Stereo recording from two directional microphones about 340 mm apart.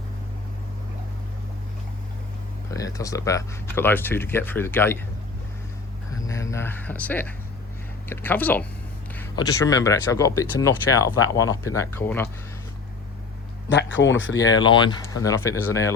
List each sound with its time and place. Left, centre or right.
2.6 s speech: centre
6.2 s speech: centre
13.7 s speech: left
14.3 s speech: centre